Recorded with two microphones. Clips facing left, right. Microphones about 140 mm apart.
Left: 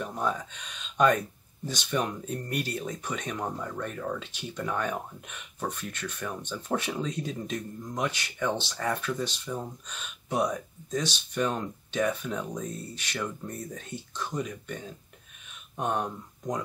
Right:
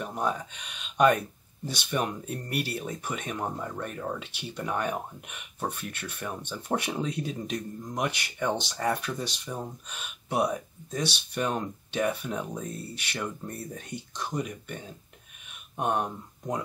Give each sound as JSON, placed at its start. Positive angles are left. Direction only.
{"t": 0.0, "sound": "speech", "side_deg": -15}